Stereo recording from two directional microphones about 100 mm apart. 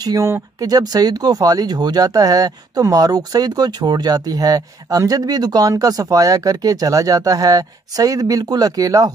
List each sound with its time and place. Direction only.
0.0 s speech: 40° right (ahead or behind)